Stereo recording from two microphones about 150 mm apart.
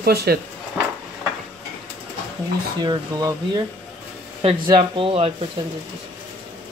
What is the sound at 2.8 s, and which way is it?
Speech, 25° right (ahead or behind).